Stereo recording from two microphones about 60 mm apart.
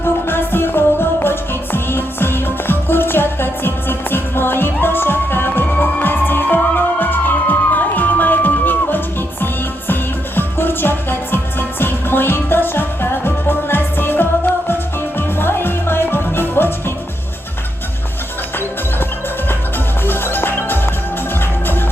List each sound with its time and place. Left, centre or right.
0.0 s music: left
15.4 s music: left
20.1 s music: left